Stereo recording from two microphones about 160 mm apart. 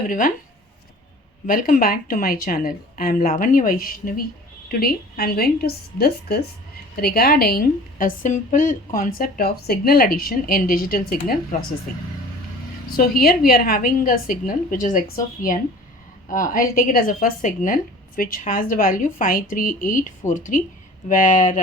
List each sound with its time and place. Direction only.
0.1 s a woman's voice: 60° left (ahead or behind)
1.5 s a woman's voice: 60° left (ahead or behind)
13.0 s a woman's voice: 70° left (ahead or behind); by 21.6 s 55° left (ahead or behind)